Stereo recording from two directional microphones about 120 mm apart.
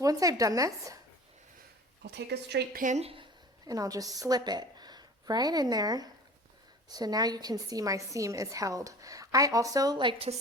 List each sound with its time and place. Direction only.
0.0 s a woman's voice: 30° right (ahead or behind)
2.8 s speech: 70° right (ahead or behind)
3.7 s a woman's voice: 30° right (ahead or behind)